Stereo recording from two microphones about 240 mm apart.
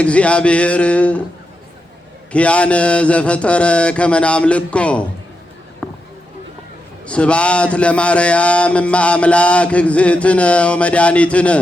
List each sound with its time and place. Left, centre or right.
0.0 s a man's voice: centre
2.3 s a man's voice: centre
5.8 s a sound: centre
7.0 s a man's voice: centre